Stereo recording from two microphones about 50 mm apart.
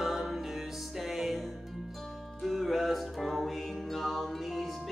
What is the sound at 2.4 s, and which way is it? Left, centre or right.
Music, centre.